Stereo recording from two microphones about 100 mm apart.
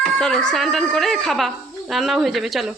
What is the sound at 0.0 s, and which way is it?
Speech, 5° left (ahead or behind).